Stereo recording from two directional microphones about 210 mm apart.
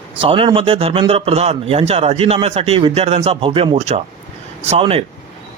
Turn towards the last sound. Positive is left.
turn(degrees=-30)  # may be behind; listen again after turning